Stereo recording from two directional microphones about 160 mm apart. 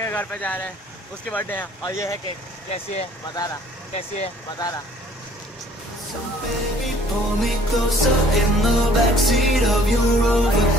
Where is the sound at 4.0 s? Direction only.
40° left (ahead or behind).